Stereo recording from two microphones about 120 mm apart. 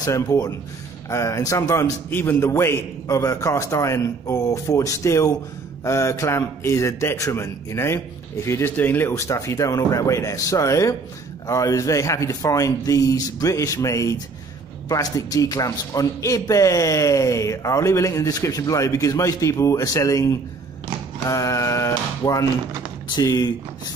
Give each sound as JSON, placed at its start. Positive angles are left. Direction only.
{"t": 0.0, "sound": "a man's voice", "side_deg": 30}
{"t": 21.3, "sound": "a sound", "side_deg": 25}
{"t": 23.0, "sound": "speech", "side_deg": 35}